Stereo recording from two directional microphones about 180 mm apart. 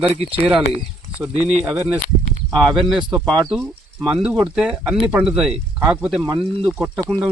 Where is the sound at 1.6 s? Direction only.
10° right (ahead or behind).